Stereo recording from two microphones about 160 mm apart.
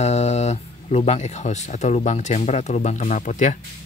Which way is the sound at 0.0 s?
45° left (ahead or behind).